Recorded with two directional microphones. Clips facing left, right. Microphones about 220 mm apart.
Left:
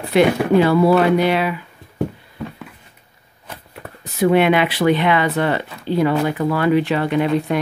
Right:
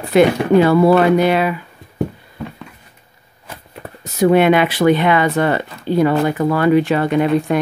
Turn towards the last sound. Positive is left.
turn(degrees=-45)  # may be behind; listen again after turning